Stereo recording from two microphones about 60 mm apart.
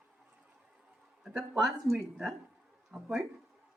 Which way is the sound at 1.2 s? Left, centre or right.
Centre.